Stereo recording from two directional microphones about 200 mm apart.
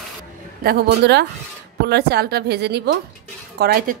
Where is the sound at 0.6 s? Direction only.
55° right (ahead or behind).